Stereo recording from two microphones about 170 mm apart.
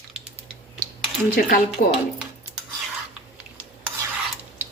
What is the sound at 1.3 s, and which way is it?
Speech, 60° left (ahead or behind).